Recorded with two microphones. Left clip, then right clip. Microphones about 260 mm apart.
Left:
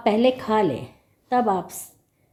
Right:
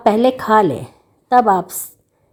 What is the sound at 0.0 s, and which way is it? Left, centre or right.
A woman's voice, right.